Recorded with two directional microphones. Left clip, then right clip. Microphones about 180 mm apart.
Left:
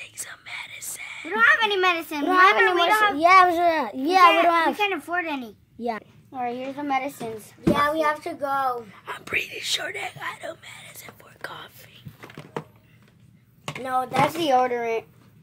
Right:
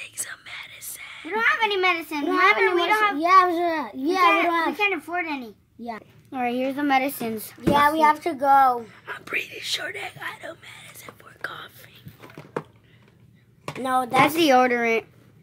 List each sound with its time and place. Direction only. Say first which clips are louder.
0.0 s whispering: right 2 dB; 10° left (ahead or behind)
1.3 s a child's voice: left 3 dB; 40° left (ahead or behind)
5.8 s a child's voice: left 6 dB; 50° left (ahead or behind)
6.3 s a woman's voice: right 4 dB; 40° right (ahead or behind)
8.9 s whispering: left 1 dB; 10° left (ahead or behind)
13.8 s a woman's voice: right 3 dB; 45° right (ahead or behind)